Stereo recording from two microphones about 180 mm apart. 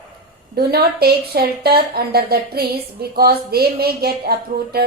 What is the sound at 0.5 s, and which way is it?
A woman's voice, 60° right (ahead or behind).